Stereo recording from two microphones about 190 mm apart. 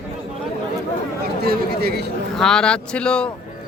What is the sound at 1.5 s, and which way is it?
Speech, 55° right (ahead or behind).